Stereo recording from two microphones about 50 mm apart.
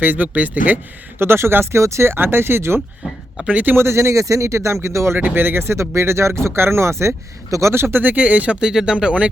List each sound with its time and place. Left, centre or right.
0.0 s speech: right
1.2 s speech: right
3.5 s speech: right
3.8 s speech: right
5.1 s speech: right
8.0 s speech: right
8.6 s speech: centre